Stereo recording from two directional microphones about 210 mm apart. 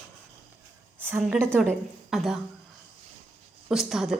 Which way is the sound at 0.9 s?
10° right (ahead or behind).